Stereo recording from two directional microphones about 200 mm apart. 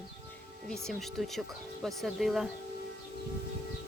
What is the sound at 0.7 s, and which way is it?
Speech, centre (ahead or behind).